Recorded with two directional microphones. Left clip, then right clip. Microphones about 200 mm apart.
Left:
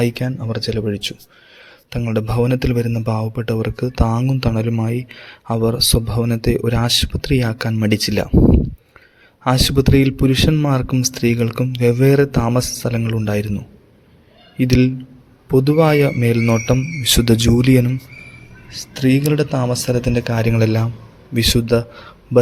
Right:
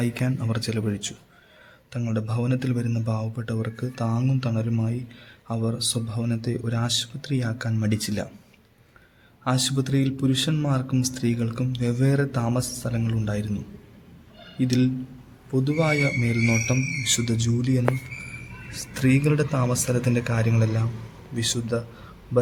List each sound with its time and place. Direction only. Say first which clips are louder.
0.0 s a man's voice: left 8 dB; 15° left (ahead or behind); by 8.3 s 35° left (ahead or behind)
9.4 s speech: left 9 dB; 30° left (ahead or behind)
14.6 s speech: left 8 dB; 30° left (ahead or behind)
18.9 s a man's voice: left 6 dB; 15° left (ahead or behind); by 21.8 s 30° left (ahead or behind)